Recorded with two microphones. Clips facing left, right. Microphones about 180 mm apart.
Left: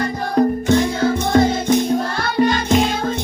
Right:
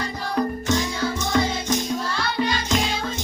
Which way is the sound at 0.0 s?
55° left (ahead or behind).